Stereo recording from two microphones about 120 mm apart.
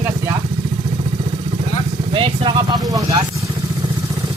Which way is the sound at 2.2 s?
45° right (ahead or behind).